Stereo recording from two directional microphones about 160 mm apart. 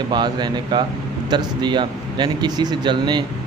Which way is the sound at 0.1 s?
25° right (ahead or behind).